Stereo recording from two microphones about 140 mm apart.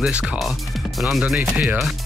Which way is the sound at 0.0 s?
5° right (ahead or behind).